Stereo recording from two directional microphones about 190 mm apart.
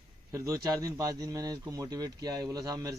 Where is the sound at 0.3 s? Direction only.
15° right (ahead or behind).